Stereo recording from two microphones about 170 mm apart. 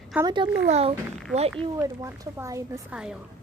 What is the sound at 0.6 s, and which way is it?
Speech, 40° right (ahead or behind).